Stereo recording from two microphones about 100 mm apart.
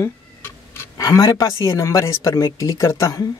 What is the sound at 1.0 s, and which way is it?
Speech, 40° left (ahead or behind).